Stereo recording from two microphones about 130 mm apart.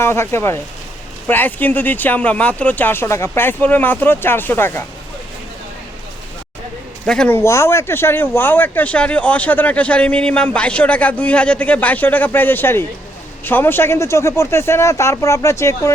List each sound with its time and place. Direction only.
0.0 s a man's voice: 20° left (ahead or behind)
7.0 s speech: 5° left (ahead or behind)
7.3 s a man's voice: 20° left (ahead or behind)